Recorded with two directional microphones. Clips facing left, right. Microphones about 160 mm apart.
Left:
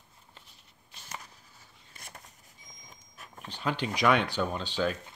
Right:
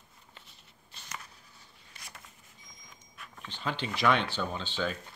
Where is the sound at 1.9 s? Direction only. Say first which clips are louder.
Left 2 dB; 45° left (ahead or behind).